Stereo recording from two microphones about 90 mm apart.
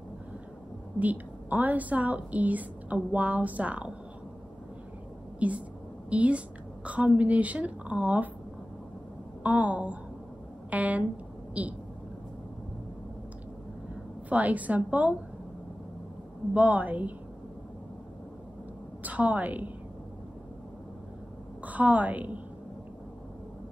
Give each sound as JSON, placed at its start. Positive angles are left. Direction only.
{"t": 0.9, "sound": "a woman's voice", "side_deg": -20}
{"t": 5.4, "sound": "a woman's voice", "side_deg": -15}
{"t": 9.4, "sound": "a woman's voice", "side_deg": -15}
{"t": 14.3, "sound": "a woman's voice", "side_deg": -15}
{"t": 16.5, "sound": "a woman's voice", "side_deg": -15}
{"t": 19.0, "sound": "a woman's voice", "side_deg": -15}
{"t": 21.6, "sound": "a woman's voice", "side_deg": -15}